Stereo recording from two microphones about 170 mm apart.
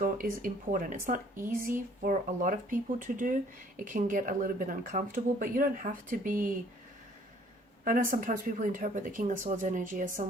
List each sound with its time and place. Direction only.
0.0 s speech: 55° right (ahead or behind)
7.9 s speech: 55° right (ahead or behind)